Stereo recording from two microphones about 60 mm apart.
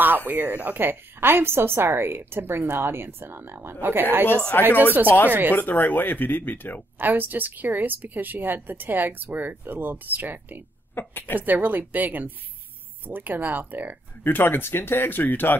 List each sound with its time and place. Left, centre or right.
0.3 s a woman's voice: right
4.5 s speech: left
7.0 s a woman's voice: right
11.0 s speech: left
11.3 s a woman's voice: right
14.2 s speech: left